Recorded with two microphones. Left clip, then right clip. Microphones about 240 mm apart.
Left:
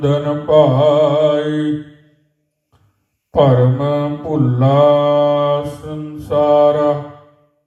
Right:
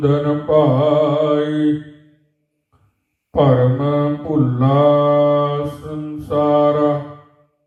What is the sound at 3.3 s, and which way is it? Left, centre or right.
Mantra, left.